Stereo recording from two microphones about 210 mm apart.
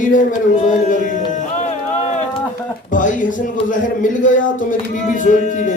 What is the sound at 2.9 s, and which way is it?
Speech, 40° left (ahead or behind).